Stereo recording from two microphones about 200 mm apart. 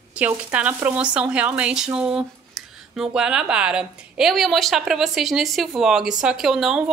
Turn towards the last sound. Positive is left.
turn(degrees=0)  # may be behind; listen again after turning